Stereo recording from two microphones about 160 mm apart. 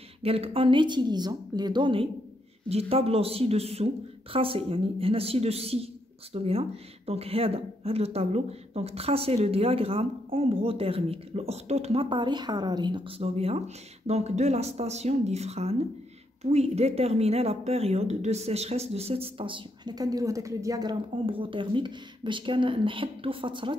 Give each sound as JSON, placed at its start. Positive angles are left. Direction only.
{"t": 0.2, "sound": "a woman's voice", "side_deg": -35}
{"t": 21.3, "sound": "a woman's voice", "side_deg": -35}